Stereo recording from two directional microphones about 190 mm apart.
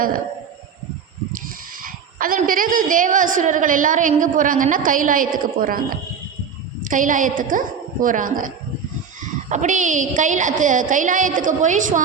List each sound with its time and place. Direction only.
1.8 s a woman's voice: 45° right (ahead or behind)